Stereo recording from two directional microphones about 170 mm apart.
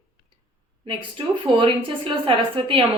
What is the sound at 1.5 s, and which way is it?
A woman's voice, 30° right (ahead or behind).